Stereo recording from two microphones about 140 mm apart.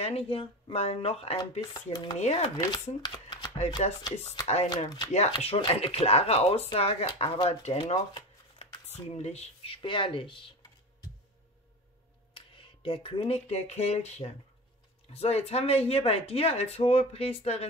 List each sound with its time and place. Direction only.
0.0 s chopping: 45° left (ahead or behind); by 2.1 s 30° left (ahead or behind)
2.1 s speech: 50° left (ahead or behind)
2.5 s speech: 25° left (ahead or behind)
3.8 s speech: 50° left (ahead or behind)
4.6 s speech: 30° left (ahead or behind); by 9.8 s 50° left (ahead or behind)
9.8 s chopping: 35° left (ahead or behind)
12.4 s speech: 40° left (ahead or behind)